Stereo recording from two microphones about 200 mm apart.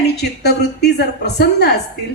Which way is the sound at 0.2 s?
55° left (ahead or behind).